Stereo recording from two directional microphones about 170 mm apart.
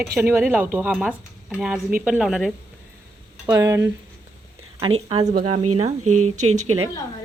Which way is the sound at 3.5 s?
20° right (ahead or behind).